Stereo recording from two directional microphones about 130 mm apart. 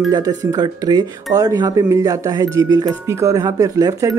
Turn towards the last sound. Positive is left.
turn(degrees=-25)  # may be behind; listen again after turning